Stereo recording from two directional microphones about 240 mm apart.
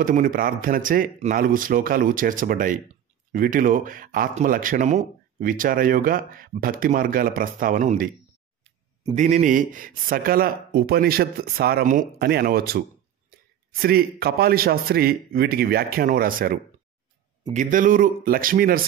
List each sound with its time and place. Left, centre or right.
0.0 s speech: right